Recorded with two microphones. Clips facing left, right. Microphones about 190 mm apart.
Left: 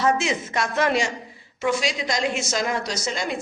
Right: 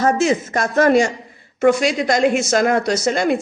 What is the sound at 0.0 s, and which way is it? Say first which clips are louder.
A woman's voice: right 6 dB; 45° right (ahead or behind).